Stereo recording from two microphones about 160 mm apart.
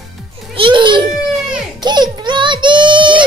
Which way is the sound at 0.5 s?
30° right (ahead or behind).